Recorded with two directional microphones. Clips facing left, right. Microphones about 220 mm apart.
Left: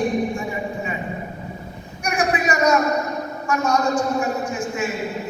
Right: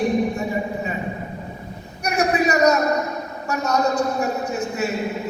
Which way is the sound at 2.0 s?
40° right (ahead or behind).